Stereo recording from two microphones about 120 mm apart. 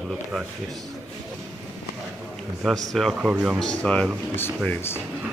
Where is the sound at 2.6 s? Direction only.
5° left (ahead or behind).